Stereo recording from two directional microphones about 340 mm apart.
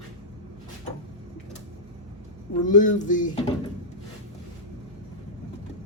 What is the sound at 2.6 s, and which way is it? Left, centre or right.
Speech, left.